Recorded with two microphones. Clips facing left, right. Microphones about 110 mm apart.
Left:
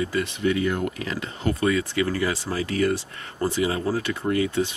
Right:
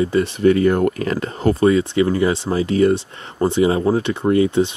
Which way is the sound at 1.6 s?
25° right (ahead or behind).